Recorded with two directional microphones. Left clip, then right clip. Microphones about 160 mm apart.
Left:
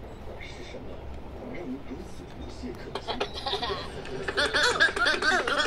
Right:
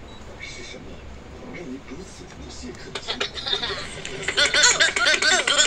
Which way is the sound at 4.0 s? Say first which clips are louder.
Right 7 dB; 5° right (ahead or behind).